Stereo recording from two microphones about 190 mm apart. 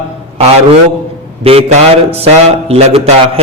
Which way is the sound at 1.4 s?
30° right (ahead or behind).